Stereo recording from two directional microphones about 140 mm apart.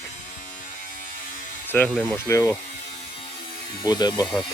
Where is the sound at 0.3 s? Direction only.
65° left (ahead or behind).